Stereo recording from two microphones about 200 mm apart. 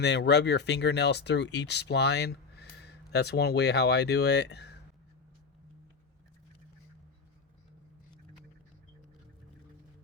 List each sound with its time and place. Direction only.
0.0 s speech: 55° left (ahead or behind)